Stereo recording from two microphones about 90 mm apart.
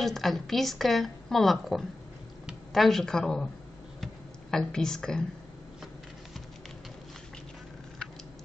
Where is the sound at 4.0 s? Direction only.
5° left (ahead or behind).